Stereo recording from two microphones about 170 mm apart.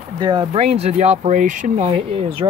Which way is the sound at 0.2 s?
25° right (ahead or behind).